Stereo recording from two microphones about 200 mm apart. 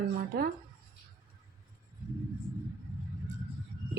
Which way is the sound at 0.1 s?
50° right (ahead or behind).